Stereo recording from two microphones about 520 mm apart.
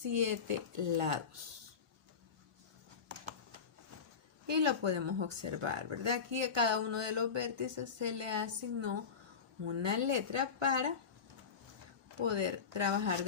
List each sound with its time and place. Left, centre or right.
0.1 s speech: right
4.4 s speech: right
9.6 s speech: right
12.1 s speech: right